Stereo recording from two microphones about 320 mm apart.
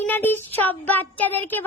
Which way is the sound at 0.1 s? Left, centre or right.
Centre.